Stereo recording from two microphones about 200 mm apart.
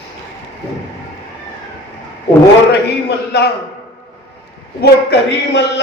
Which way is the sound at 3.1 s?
55° left (ahead or behind).